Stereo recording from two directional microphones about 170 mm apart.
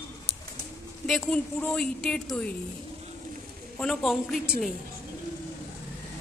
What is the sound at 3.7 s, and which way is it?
Speech, centre (ahead or behind).